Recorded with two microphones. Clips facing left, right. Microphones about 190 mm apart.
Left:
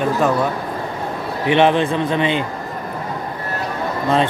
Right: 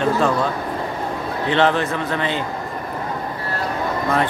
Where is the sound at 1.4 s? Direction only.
15° left (ahead or behind).